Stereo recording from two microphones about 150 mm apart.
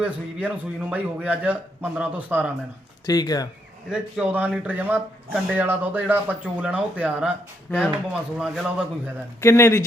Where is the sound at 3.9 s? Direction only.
10° right (ahead or behind).